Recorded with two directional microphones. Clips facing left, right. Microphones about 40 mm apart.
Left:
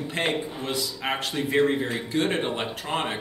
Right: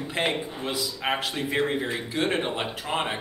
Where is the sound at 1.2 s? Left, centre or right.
Centre.